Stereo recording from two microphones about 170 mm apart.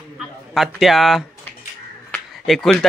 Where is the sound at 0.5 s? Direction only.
Centre (ahead or behind).